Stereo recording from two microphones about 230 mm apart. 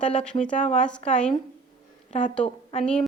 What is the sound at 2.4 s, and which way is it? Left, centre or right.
Speech, left.